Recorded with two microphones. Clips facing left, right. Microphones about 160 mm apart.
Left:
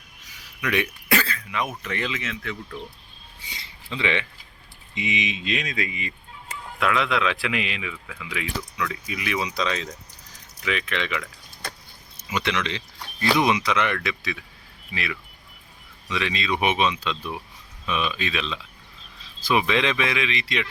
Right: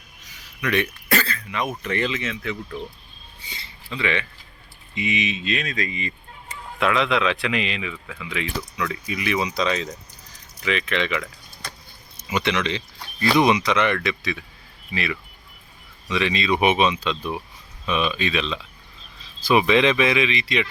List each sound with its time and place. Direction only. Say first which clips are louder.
0.6 s a man's voice: right 2 dB; 10° left (ahead or behind); by 2.6 s 5° right (ahead or behind)
3.8 s a man's voice: right 1 dB; 20° left (ahead or behind); by 11.3 s centre (ahead or behind)
12.3 s a man's voice: right 3 dB; centre (ahead or behind)